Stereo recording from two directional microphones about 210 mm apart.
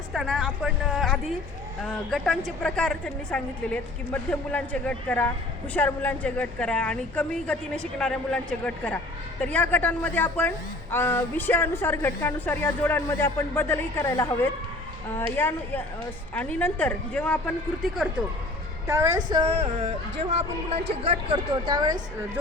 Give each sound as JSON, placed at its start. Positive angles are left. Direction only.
{"t": 0.1, "sound": "a woman's voice", "side_deg": 0}
{"t": 18.9, "sound": "a woman's voice", "side_deg": -15}
{"t": 21.0, "sound": "a woman's voice", "side_deg": -25}